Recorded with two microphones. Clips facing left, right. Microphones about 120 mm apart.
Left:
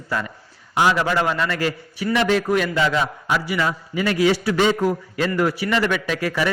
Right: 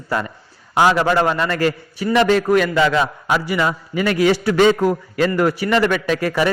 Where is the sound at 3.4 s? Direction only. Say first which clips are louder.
Right 3 dB; 55° right (ahead or behind).